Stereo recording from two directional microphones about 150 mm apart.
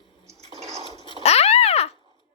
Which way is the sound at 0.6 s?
45° right (ahead or behind).